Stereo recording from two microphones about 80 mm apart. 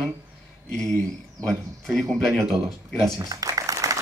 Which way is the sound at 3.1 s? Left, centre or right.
Right.